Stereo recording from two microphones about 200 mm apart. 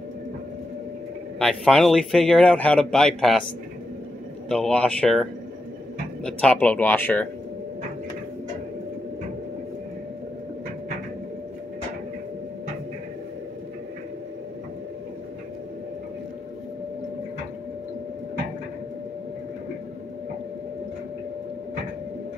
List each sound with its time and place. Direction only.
1.4 s a man's voice: centre (ahead or behind)
4.5 s a man's voice: 5° left (ahead or behind)